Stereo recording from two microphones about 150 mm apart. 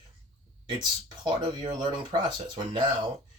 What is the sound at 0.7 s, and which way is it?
Speech, 30° right (ahead or behind).